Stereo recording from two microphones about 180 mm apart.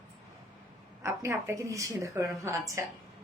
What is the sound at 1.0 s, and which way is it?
Speech, 15° right (ahead or behind).